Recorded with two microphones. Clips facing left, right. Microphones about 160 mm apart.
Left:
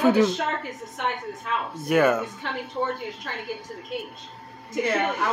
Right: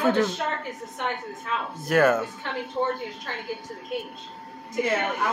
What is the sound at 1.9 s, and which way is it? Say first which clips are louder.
Speech: even; centre (ahead or behind).